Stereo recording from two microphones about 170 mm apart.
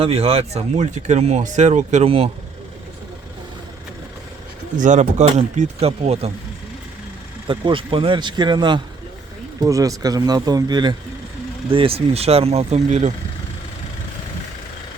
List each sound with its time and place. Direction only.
0.0 s speech: 35° right (ahead or behind)
4.8 s speech: 45° right (ahead or behind)
7.4 s speech: 30° right (ahead or behind)